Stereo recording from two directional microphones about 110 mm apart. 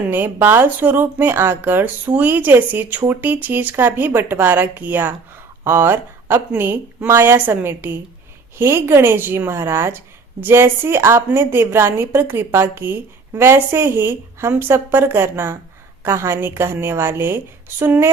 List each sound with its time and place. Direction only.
0.0 s a woman's voice: 20° right (ahead or behind)